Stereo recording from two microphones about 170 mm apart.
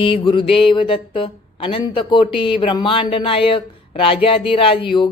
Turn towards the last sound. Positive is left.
turn(degrees=30)  # may be behind; listen again after turning